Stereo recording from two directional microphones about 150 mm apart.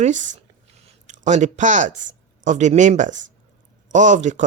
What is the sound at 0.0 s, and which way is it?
Speech, 55° right (ahead or behind).